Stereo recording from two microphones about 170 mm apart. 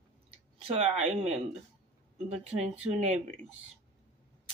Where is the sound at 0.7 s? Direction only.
40° right (ahead or behind).